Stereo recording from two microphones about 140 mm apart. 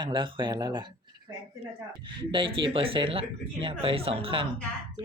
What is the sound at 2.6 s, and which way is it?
Speech, 40° right (ahead or behind).